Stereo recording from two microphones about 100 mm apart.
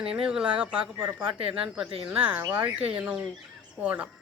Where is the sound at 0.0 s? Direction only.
10° right (ahead or behind).